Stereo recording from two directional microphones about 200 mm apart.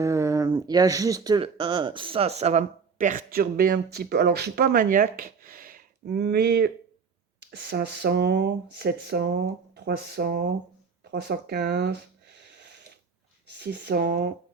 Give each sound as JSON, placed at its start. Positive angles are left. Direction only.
{"t": 0.0, "sound": "speech", "side_deg": -15}
{"t": 13.5, "sound": "speech", "side_deg": -55}